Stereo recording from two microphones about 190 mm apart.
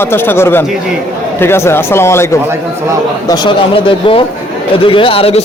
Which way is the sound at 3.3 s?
25° left (ahead or behind).